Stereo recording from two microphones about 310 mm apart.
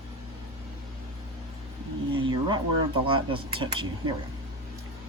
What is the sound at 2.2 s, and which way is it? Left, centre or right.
Speech, centre.